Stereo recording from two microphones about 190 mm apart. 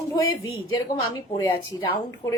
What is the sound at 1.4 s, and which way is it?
Speech, 15° left (ahead or behind).